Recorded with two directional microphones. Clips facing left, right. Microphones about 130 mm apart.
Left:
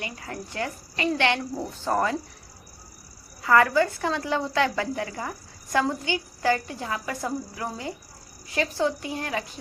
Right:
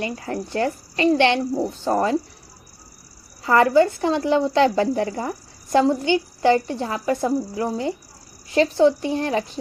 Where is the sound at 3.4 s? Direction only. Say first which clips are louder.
Right 4 dB; 25° right (ahead or behind).